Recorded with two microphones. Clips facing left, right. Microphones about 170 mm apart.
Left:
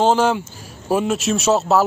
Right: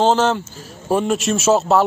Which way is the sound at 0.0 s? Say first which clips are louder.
Even; 10° left (ahead or behind).